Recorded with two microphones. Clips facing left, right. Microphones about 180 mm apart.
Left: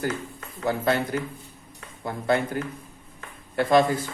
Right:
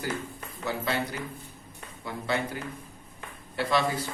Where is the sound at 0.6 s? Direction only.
50° left (ahead or behind).